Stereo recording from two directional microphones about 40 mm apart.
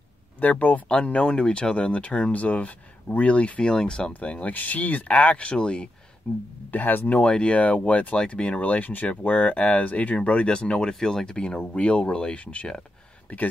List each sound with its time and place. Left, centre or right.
0.4 s speech: left
0.8 s speech: left
4.1 s speech: left
4.6 s speech: left
6.2 s speech: centre
6.7 s speech: left
7.2 s speech: left
11.3 s speech: left
13.3 s speech: left